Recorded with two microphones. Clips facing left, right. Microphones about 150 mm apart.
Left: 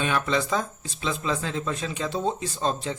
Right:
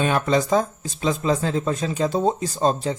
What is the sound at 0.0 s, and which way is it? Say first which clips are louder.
Speech: right 5 dB; 40° right (ahead or behind).